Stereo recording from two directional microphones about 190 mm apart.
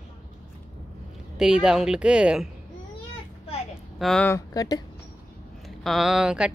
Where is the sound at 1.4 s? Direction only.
5° right (ahead or behind).